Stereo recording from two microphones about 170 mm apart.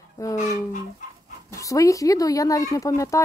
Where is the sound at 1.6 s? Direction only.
20° left (ahead or behind).